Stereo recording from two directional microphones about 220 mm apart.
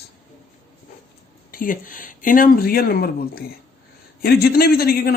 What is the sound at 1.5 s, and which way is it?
A man's voice, 40° left (ahead or behind).